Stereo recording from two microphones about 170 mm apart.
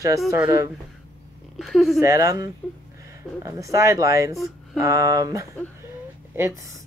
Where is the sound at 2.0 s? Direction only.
20° right (ahead or behind).